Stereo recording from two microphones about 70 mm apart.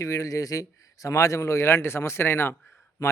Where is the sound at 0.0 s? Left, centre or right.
Left.